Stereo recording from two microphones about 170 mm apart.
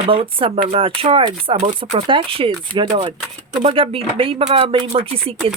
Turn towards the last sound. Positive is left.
turn(degrees=-30)  # may be behind; listen again after turning